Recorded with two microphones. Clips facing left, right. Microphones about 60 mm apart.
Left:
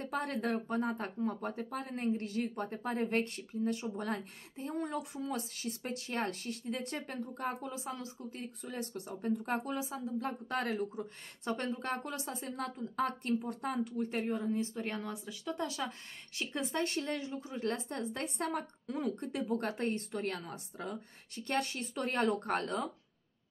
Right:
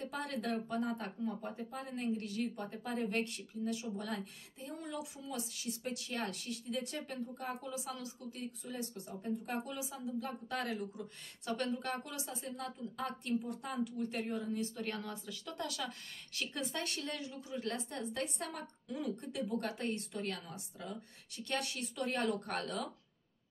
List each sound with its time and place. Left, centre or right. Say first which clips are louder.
0.0 s speech: left 4 dB; left
1.4 s speech: left 4 dB; left
8.7 s speech: left 6 dB; left
11.0 s speech: left 5 dB; left